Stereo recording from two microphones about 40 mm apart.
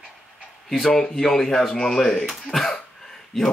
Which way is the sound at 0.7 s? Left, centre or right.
Centre.